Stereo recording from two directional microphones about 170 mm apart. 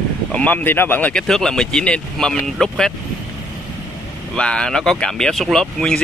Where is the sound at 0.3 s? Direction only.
10° left (ahead or behind).